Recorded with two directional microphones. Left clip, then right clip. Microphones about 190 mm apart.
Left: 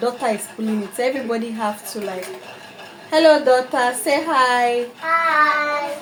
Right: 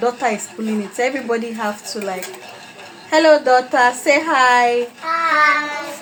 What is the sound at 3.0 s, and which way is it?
A woman's voice, 20° right (ahead or behind).